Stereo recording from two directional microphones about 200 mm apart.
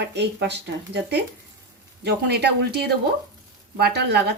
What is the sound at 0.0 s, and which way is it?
Speech, 60° right (ahead or behind).